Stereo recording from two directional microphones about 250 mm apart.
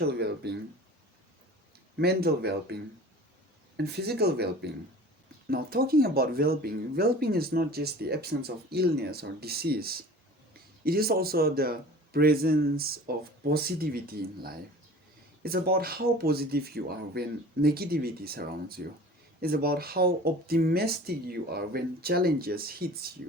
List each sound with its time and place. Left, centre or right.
0.0 s speech: right
2.0 s speech: right
3.8 s speech: right